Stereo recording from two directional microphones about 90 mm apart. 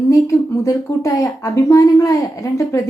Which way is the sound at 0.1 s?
35° left (ahead or behind).